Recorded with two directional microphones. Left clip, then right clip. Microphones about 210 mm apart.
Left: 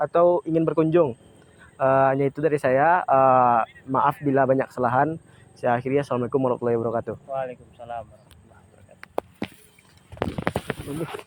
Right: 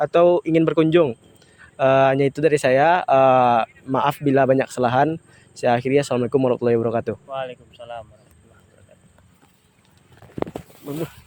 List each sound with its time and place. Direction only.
0.0 s speech: 40° right (ahead or behind)
1.7 s speech: 50° right (ahead or behind)
7.3 s speech: 15° right (ahead or behind)